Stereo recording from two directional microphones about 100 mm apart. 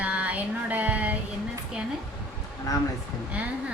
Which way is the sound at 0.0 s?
15° right (ahead or behind).